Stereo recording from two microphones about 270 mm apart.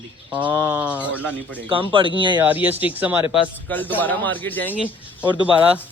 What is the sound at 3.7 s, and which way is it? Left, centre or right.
A man's voice, centre.